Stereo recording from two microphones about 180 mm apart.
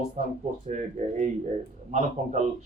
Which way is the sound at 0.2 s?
40° right (ahead or behind).